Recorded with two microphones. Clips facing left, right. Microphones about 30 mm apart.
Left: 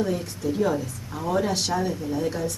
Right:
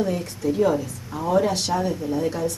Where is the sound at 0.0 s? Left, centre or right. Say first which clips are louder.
Right 2 dB; centre.